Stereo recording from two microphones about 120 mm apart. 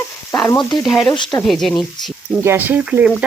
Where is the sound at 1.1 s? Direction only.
40° left (ahead or behind).